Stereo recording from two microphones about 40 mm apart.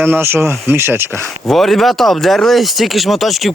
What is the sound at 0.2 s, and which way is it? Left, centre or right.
Speech, right.